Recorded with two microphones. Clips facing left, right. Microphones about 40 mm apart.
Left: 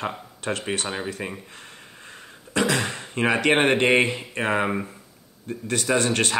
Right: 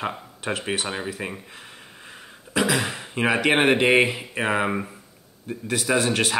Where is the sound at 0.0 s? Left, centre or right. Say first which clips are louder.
Even; centre.